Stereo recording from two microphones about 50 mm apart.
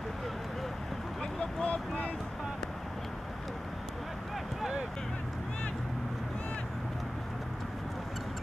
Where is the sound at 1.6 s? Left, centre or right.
Left.